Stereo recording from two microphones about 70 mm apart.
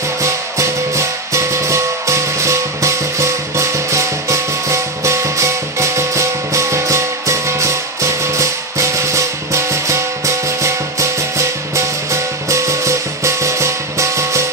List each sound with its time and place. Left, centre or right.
0.2 s music: right